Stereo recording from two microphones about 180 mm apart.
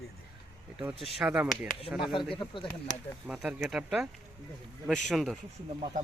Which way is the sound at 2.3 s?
30° left (ahead or behind).